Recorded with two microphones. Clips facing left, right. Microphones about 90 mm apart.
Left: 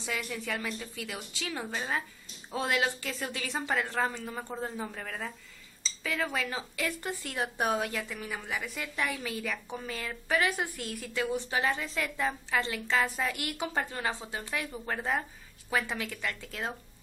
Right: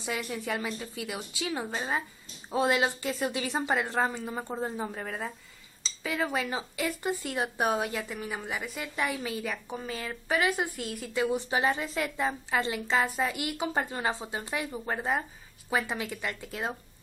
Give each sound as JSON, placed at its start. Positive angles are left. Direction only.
{"t": 0.0, "sound": "speech", "side_deg": -15}
{"t": 11.2, "sound": "speech", "side_deg": -20}